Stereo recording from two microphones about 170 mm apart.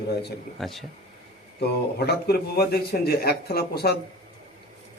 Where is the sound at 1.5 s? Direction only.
75° left (ahead or behind).